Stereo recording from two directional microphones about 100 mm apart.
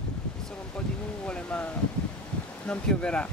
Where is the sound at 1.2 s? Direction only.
15° left (ahead or behind).